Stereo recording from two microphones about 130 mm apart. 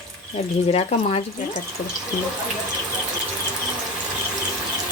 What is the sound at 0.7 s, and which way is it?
Speech, 50° left (ahead or behind).